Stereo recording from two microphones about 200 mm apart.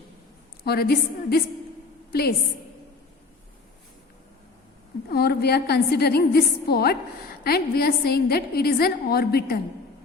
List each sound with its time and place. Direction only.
0.6 s a woman's voice: 50° left (ahead or behind)
5.0 s a woman's voice: 50° left (ahead or behind)